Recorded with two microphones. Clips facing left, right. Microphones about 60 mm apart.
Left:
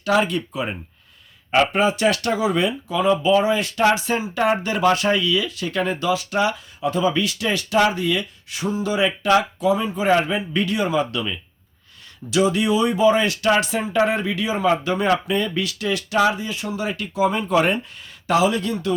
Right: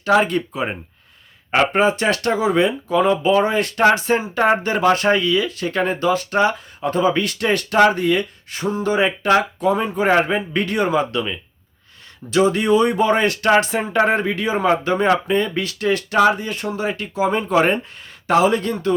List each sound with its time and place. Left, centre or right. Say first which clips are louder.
0.0 s speech: right 3 dB; right
3.0 s speech: right 1 dB; right
12.3 s speech: right 3 dB; right
16.8 s speech: even; right